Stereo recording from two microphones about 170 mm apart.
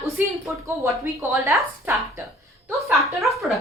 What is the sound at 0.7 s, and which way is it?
Speech, 15° right (ahead or behind).